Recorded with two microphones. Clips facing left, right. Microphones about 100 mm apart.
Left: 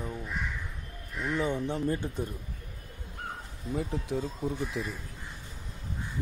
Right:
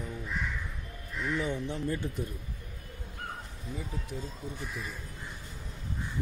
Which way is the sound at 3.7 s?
90° left.